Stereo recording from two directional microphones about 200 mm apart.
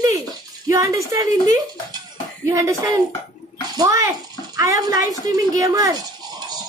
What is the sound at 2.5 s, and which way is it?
A man's voice, 15° right (ahead or behind).